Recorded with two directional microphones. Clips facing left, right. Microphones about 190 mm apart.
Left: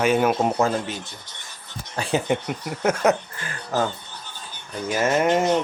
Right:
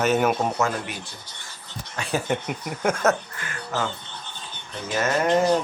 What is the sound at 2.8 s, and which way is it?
Speech, 10° left (ahead or behind).